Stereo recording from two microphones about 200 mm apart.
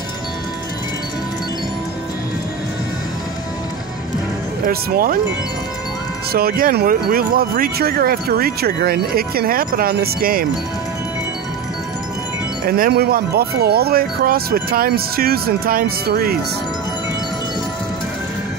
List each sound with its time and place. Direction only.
4.6 s speech: 45° right (ahead or behind)
6.3 s speech: 45° right (ahead or behind)
12.6 s speech: 45° right (ahead or behind)